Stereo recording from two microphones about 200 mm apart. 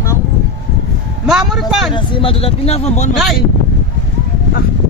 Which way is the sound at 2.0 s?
30° left (ahead or behind).